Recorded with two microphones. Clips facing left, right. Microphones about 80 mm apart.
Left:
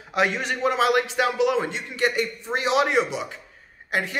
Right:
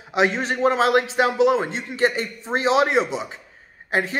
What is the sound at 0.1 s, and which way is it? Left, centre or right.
A man's voice, right.